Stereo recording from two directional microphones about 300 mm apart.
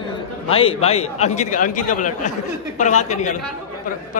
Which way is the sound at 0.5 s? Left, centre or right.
Centre.